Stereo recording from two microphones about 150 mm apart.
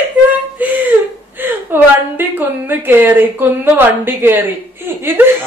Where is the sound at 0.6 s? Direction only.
10° right (ahead or behind).